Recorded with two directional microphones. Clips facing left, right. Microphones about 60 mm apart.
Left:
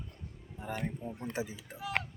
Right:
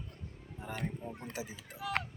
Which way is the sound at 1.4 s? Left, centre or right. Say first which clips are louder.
Left 6 dB; left.